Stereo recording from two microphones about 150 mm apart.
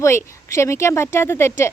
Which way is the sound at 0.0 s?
20° left (ahead or behind).